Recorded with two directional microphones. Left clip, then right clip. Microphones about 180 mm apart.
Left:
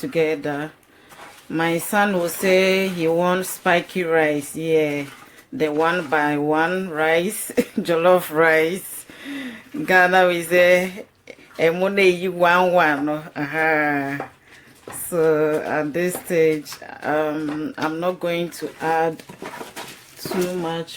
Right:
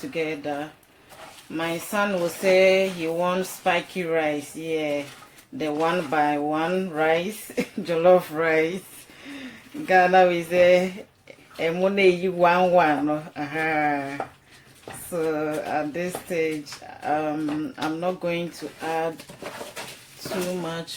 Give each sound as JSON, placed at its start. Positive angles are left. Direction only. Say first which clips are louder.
{"t": 0.1, "sound": "speech", "louder": "left 7 dB", "side_deg": 55}
{"t": 9.8, "sound": "a man's voice", "louder": "left 2 dB", "side_deg": 50}
{"t": 15.2, "sound": "a man's voice", "louder": "left 8 dB", "side_deg": 45}
{"t": 20.7, "sound": "music", "louder": "left 5 dB", "side_deg": 30}